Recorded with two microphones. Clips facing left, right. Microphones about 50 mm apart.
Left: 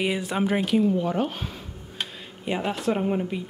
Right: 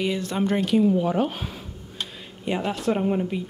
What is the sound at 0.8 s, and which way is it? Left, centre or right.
Speech, centre.